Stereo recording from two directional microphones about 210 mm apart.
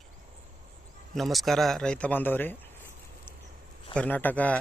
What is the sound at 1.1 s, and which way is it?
A man's voice, centre (ahead or behind).